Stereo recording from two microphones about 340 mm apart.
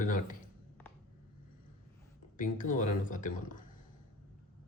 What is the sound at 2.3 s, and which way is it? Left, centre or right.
Speech, left.